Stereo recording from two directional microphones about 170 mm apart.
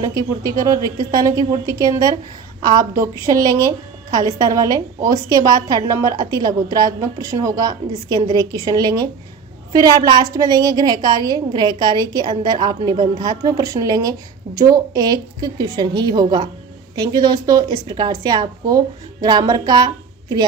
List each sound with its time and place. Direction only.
0.0 s a woman's voice: 20° right (ahead or behind)